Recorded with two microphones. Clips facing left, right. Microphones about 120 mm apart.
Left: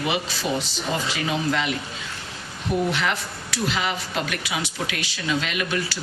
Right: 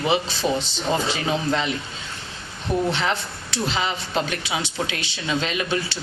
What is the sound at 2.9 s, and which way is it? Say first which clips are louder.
Speech: right 1 dB; 25° right (ahead or behind).